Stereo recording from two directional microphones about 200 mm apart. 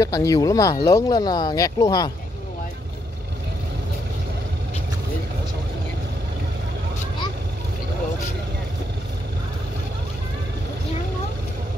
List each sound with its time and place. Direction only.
0.0 s speech: 15° left (ahead or behind)